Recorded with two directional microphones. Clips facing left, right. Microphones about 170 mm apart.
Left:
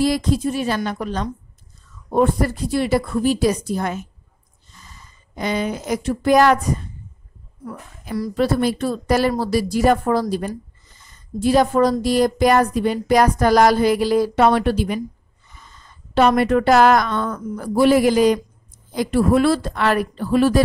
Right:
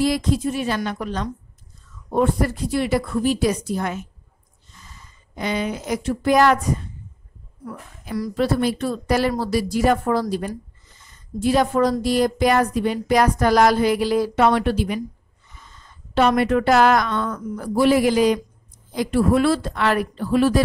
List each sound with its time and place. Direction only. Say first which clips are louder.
0.0 s a woman's voice: left 1 dB; 35° left (ahead or behind)
8.1 s a woman's voice: left 2 dB; 35° left (ahead or behind)
11.3 s a woman's voice: left 2 dB; 35° left (ahead or behind)
16.2 s a woman's voice: left 2 dB; 40° left (ahead or behind)